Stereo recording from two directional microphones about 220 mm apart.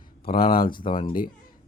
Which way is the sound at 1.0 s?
40° left (ahead or behind).